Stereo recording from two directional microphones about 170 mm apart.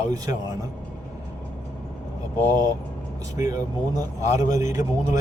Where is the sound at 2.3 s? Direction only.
15° left (ahead or behind).